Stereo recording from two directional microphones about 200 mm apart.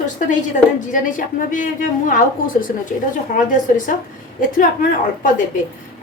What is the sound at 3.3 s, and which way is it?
A woman's voice, 40° left (ahead or behind).